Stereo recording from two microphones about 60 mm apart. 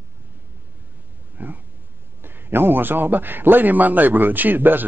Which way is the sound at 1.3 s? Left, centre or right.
Right.